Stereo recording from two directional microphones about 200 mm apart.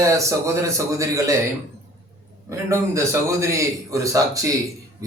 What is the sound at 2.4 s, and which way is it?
A man's voice, 15° right (ahead or behind).